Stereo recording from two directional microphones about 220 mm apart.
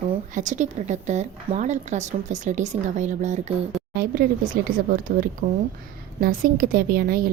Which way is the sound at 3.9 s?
40° right (ahead or behind).